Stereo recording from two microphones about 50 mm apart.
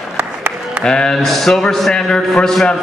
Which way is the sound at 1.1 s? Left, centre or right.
Centre.